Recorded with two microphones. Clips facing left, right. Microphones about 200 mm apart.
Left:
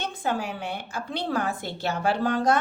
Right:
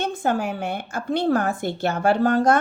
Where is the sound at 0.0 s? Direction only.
45° right (ahead or behind).